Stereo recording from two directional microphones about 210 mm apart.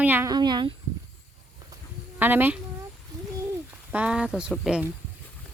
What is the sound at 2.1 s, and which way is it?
Speech, 10° right (ahead or behind).